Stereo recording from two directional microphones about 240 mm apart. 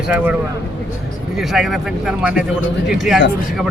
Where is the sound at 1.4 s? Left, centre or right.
Centre.